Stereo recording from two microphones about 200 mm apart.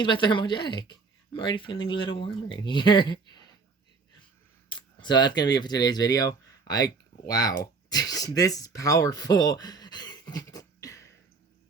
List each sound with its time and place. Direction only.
0.0 s speech: 25° left (ahead or behind)
4.7 s speech: 20° left (ahead or behind)